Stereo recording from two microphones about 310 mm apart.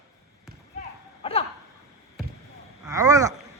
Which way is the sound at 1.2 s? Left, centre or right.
Centre.